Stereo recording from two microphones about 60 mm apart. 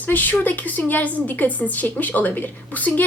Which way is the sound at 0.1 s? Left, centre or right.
Left.